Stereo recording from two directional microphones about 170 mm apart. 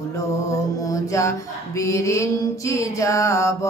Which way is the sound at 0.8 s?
20° left (ahead or behind).